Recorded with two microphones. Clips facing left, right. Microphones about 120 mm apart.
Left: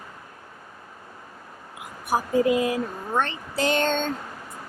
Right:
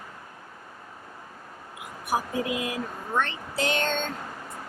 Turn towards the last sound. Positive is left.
turn(degrees=35)  # may be behind; listen again after turning